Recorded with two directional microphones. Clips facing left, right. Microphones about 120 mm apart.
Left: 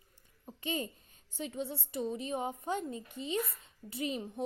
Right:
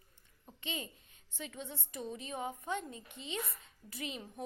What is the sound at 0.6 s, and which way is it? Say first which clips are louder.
A child's voice: left 6 dB; 40° left (ahead or behind).